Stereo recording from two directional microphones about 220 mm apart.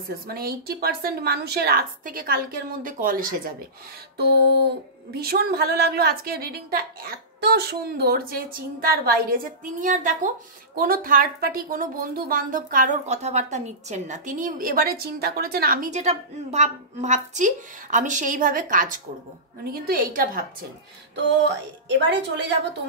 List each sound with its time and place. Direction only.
0.1 s a woman's voice: 45° right (ahead or behind)
5.1 s a woman's voice: 45° right (ahead or behind)
21.8 s a woman's voice: 50° right (ahead or behind)